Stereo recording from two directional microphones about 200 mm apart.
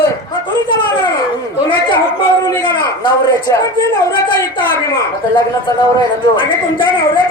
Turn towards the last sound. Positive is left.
turn(degrees=25)  # may be behind; listen again after turning